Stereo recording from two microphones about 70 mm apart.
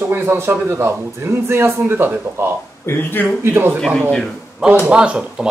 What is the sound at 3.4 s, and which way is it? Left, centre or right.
Speech, right.